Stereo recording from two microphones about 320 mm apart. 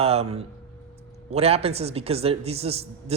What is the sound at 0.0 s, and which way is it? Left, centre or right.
A man's voice, centre.